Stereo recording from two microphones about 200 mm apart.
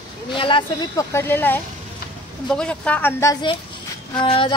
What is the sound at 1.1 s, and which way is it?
A woman's voice, 10° left (ahead or behind).